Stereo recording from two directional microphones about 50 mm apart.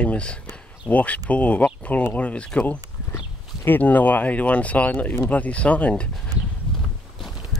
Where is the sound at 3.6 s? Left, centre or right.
Left.